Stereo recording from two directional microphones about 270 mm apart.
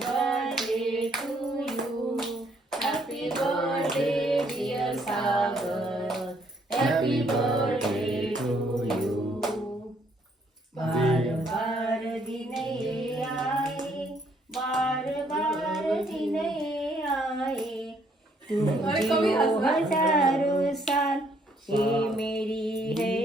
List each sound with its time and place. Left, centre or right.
0.0 s hands: centre
3.4 s female singing: centre
8.4 s music: centre
10.8 s music: centre
13.4 s child singing: centre
18.9 s a sound: centre
20.8 s hands: centre
21.8 s music: centre